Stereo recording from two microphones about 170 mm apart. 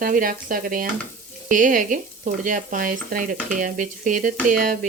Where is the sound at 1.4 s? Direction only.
50° right (ahead or behind).